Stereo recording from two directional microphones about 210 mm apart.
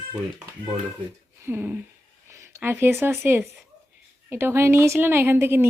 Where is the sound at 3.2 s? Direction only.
10° right (ahead or behind).